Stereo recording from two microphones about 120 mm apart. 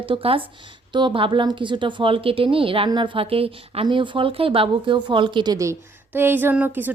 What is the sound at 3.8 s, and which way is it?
Speech, 40° right (ahead or behind).